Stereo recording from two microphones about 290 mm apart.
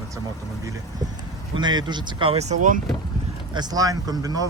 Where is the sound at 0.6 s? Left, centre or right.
Centre.